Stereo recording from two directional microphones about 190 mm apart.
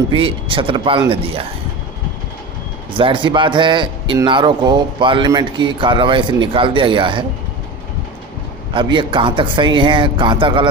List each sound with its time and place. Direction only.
0.1 s a man's voice: 30° right (ahead or behind)
2.9 s a man's voice: 25° right (ahead or behind)
8.7 s a man's voice: 25° right (ahead or behind)